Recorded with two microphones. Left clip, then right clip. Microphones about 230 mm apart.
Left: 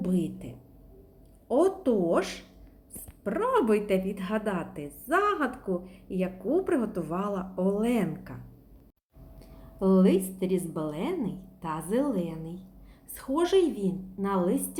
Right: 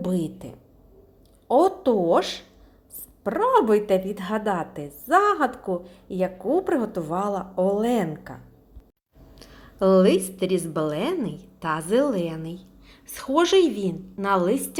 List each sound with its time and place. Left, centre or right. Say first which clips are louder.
0.0 s a woman's voice: right 4 dB; right
9.4 s a woman's voice: right 8 dB; centre